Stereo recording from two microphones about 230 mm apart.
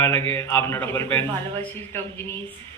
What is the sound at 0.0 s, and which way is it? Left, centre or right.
Speech, centre.